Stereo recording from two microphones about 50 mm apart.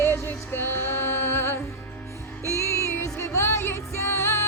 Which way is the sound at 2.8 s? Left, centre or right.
Left.